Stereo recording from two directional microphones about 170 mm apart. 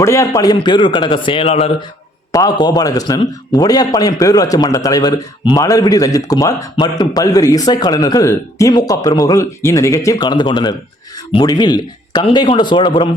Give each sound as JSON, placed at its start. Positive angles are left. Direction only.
{"t": 0.0, "sound": "a man's voice", "side_deg": 15}
{"t": 2.3, "sound": "a man's voice", "side_deg": 20}